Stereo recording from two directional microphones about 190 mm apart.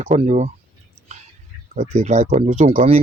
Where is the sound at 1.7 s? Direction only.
40° right (ahead or behind).